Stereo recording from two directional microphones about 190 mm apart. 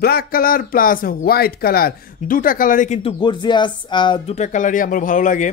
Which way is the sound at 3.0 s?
25° left (ahead or behind).